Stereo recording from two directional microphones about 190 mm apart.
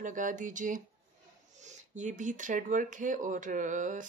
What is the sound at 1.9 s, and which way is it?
Speech, 40° right (ahead or behind).